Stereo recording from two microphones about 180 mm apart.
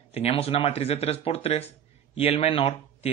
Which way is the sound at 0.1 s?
35° left (ahead or behind).